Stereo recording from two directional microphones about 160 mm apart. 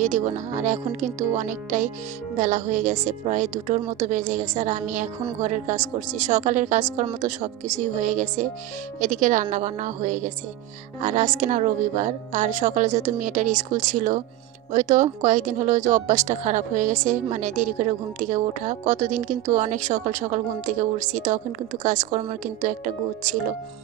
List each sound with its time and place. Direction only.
0.0 s speech: 50° right (ahead or behind)